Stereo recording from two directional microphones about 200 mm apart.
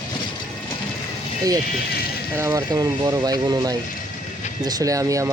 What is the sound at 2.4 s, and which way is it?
Speech, 15° right (ahead or behind).